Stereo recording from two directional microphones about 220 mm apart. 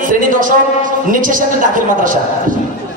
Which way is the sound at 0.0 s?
40° right (ahead or behind).